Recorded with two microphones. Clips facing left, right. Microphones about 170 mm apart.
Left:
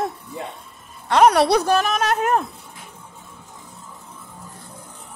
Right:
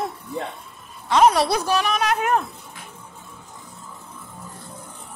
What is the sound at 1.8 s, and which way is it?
Speech, 45° left (ahead or behind).